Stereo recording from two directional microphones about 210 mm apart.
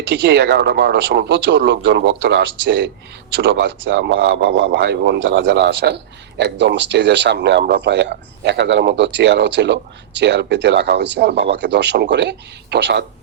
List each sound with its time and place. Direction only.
0.1 s speech: 55° right (ahead or behind)